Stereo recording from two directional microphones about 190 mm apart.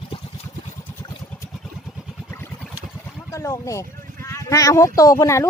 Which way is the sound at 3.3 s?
15° left (ahead or behind).